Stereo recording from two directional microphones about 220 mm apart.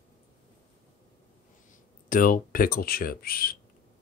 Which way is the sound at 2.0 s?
40° left (ahead or behind).